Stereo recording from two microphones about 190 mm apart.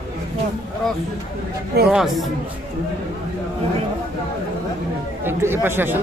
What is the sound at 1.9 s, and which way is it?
Speech, centre (ahead or behind).